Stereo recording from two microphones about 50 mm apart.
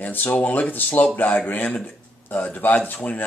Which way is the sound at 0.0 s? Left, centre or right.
Left.